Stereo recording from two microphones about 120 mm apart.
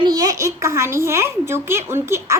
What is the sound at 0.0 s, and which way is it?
A child's voice, 30° right (ahead or behind).